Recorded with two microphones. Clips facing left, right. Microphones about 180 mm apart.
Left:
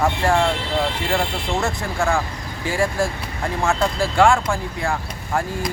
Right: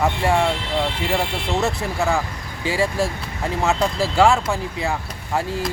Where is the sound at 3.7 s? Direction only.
5° right (ahead or behind).